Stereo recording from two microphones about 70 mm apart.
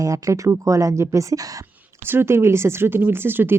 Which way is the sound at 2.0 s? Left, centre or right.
Right.